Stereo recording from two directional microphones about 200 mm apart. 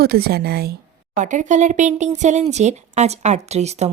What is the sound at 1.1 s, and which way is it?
Speech, 40° right (ahead or behind).